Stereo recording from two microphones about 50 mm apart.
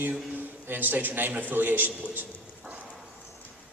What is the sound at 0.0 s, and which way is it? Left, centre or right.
A man's voice, right.